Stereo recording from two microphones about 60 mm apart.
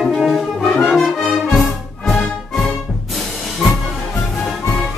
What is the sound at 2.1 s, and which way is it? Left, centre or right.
Music, centre.